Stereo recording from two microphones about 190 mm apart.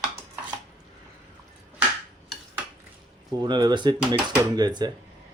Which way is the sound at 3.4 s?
25° right (ahead or behind).